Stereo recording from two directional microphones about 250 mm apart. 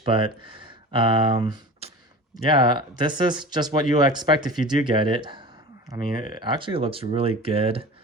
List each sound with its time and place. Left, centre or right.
0.0 s speech: right
6.1 s speech: left
6.4 s speech: centre